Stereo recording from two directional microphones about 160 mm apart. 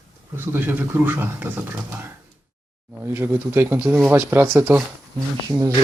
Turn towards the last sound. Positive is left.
turn(degrees=-20)  # may be behind; listen again after turning